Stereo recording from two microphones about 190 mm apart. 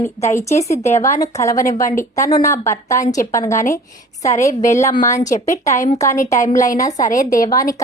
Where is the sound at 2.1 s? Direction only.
15° left (ahead or behind).